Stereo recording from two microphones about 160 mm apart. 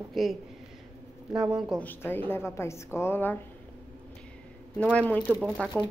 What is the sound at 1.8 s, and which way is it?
Speech, 10° left (ahead or behind).